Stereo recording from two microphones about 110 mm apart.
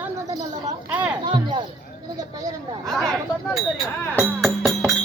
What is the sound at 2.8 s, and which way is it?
Speech, 5° left (ahead or behind).